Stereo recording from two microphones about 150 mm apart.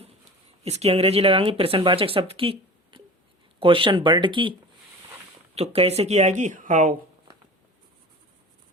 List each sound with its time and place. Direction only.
0.6 s speech: 45° right (ahead or behind)
5.5 s speech: 40° right (ahead or behind); by 6.9 s 60° right (ahead or behind)